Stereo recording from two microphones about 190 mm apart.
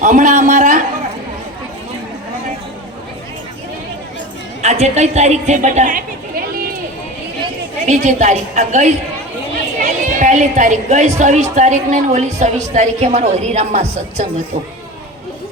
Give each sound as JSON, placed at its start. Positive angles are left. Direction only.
{"t": 0.0, "sound": "a sound", "side_deg": -40}
{"t": 4.6, "sound": "a woman's voice", "side_deg": -35}
{"t": 7.9, "sound": "a woman's voice", "side_deg": -40}
{"t": 10.2, "sound": "a woman's voice", "side_deg": -40}